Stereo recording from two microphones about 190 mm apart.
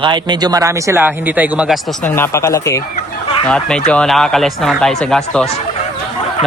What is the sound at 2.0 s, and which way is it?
Speech, 10° left (ahead or behind).